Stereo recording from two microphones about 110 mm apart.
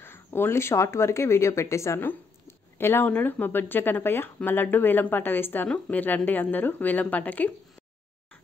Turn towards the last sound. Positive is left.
turn(degrees=15)  # may be behind; listen again after turning